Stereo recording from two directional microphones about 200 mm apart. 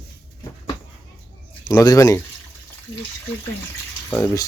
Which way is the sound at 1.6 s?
15° left (ahead or behind).